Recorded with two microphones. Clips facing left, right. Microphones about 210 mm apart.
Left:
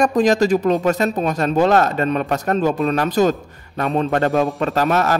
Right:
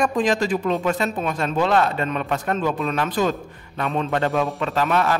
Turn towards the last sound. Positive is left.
turn(degrees=45)  # may be behind; listen again after turning